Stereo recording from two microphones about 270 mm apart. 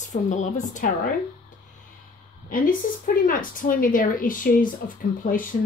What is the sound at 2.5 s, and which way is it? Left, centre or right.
A woman's voice, left.